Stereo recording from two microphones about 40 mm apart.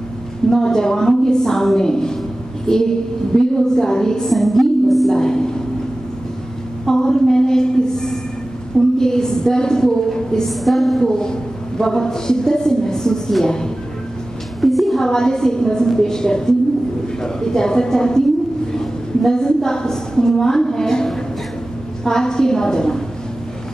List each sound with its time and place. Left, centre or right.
0.5 s a woman's voice: centre
5.1 s a woman's voice: centre
6.9 s a sound: centre
8.9 s a woman's voice: centre
11.0 s a woman's voice: centre
14.6 s a sound: centre
15.0 s a woman's voice: centre